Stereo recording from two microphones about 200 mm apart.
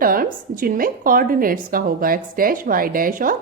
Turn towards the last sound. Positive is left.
turn(degrees=-45)  # may be behind; listen again after turning